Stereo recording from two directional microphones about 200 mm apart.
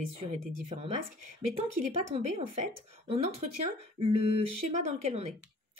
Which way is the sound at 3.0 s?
30° right (ahead or behind).